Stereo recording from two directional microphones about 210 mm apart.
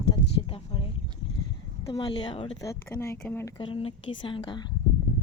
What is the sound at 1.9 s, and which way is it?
Speech, 20° left (ahead or behind).